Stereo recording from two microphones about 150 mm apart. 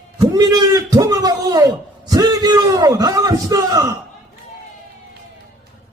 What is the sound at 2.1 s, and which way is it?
A man's voice, 25° right (ahead or behind).